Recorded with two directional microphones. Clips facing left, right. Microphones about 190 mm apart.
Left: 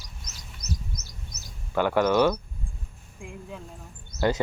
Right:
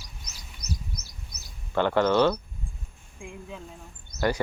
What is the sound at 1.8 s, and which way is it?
Speech, 10° left (ahead or behind).